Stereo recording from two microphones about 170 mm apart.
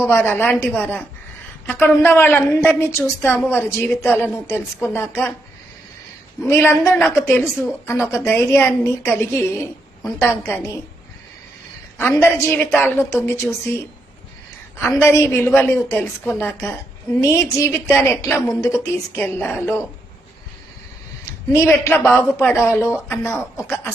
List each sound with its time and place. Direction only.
0.1 s a woman's voice: 15° left (ahead or behind)
6.4 s a woman's voice: 15° left (ahead or behind)
11.9 s a woman's voice: 10° left (ahead or behind)
14.8 s a woman's voice: 10° left (ahead or behind)
21.2 s a woman's voice: 15° left (ahead or behind)